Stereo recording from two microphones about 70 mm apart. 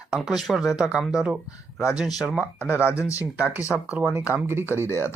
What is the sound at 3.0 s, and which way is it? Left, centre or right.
Speech, left.